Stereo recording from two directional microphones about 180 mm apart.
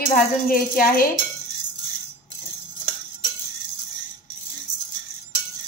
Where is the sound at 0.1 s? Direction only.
55° left (ahead or behind).